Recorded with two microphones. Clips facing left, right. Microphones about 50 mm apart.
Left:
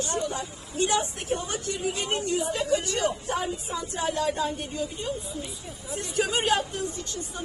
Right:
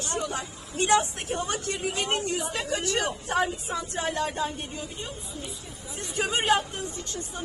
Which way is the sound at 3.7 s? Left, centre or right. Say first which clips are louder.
Left 1 dB; right.